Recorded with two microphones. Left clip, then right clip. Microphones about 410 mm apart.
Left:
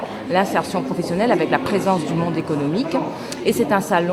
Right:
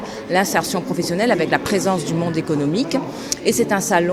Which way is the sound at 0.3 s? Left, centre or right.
Right.